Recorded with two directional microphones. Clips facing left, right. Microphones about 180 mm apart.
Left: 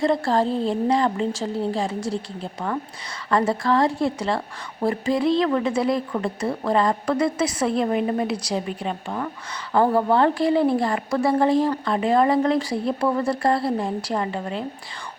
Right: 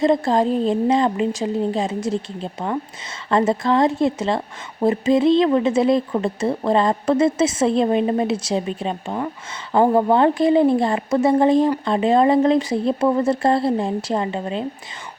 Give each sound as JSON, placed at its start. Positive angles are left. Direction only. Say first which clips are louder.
{"t": 0.0, "sound": "a woman's voice", "louder": "right 3 dB", "side_deg": -20}